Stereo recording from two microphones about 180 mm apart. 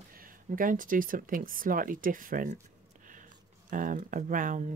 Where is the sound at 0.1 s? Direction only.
50° right (ahead or behind).